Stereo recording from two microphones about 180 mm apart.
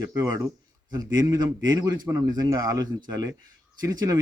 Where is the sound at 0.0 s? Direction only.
20° right (ahead or behind).